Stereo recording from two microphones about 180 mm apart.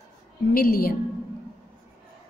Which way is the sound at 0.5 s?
55° left (ahead or behind).